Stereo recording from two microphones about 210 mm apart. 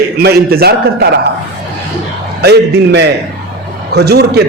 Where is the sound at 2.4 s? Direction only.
55° right (ahead or behind).